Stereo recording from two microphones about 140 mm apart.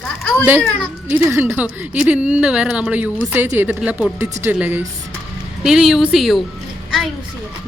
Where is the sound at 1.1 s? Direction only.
15° right (ahead or behind).